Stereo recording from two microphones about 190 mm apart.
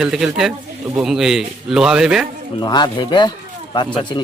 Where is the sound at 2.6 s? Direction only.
20° left (ahead or behind).